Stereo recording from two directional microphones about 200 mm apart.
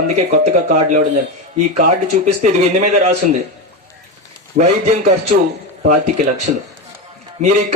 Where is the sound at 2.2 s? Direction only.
35° right (ahead or behind).